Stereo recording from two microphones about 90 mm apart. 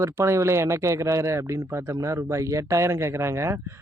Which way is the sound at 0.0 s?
35° right (ahead or behind).